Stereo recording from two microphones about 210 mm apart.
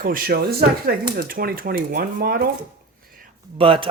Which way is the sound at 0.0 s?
45° right (ahead or behind).